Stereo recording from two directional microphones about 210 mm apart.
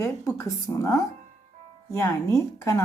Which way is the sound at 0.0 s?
15° left (ahead or behind).